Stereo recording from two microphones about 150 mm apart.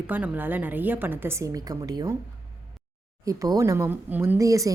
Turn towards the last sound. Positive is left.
turn(degrees=-20)  # may be behind; listen again after turning